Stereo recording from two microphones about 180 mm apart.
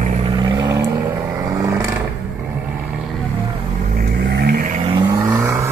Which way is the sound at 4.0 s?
60° right (ahead or behind).